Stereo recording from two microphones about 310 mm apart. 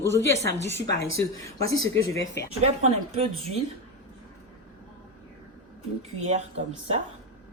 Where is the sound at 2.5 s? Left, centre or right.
Centre.